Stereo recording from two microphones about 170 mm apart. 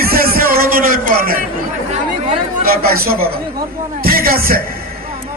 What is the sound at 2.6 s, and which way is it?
Speech, 60° right (ahead or behind).